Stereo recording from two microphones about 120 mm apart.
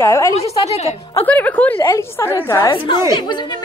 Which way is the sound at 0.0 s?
25° left (ahead or behind).